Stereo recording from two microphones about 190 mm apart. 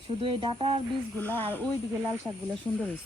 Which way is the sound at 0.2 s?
30° right (ahead or behind).